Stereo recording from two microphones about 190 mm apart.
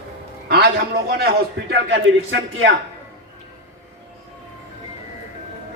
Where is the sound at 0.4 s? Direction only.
55° right (ahead or behind).